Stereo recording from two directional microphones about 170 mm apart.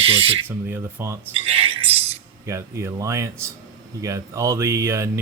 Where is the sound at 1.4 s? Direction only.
35° right (ahead or behind).